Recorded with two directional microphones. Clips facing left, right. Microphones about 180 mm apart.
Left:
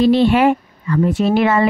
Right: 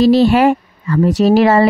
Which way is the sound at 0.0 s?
40° right (ahead or behind).